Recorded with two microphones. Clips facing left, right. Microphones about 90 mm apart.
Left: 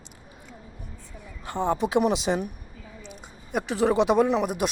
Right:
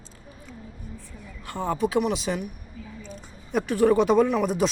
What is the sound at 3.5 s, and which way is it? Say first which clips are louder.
Speech: right 2 dB; 10° left (ahead or behind).